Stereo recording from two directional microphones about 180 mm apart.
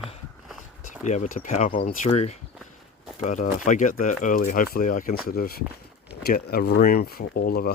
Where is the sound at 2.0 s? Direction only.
35° left (ahead or behind).